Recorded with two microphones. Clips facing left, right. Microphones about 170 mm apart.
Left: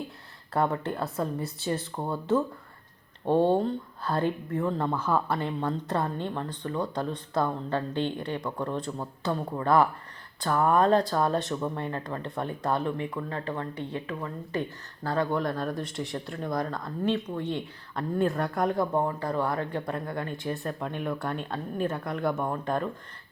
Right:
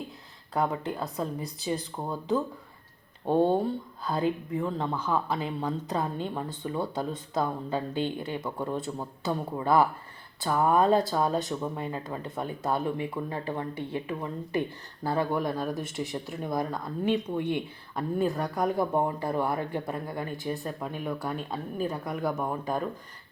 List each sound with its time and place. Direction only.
0.5 s speech: centre (ahead or behind)
5.4 s speech: 5° right (ahead or behind)
18.2 s speech: centre (ahead or behind)